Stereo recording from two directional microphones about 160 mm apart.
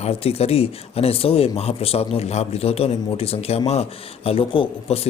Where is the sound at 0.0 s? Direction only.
40° left (ahead or behind).